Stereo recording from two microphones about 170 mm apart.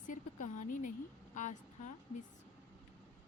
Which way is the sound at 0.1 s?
50° left (ahead or behind).